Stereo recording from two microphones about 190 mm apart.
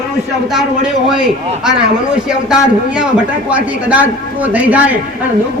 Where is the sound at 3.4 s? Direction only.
5° right (ahead or behind).